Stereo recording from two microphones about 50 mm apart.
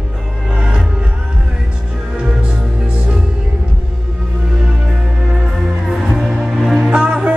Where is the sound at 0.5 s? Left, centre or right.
Centre.